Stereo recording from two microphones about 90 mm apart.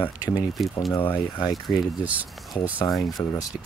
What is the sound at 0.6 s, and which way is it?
Speech, centre (ahead or behind).